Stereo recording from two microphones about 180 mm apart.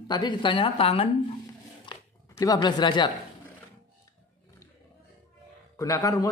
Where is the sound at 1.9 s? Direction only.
20° left (ahead or behind).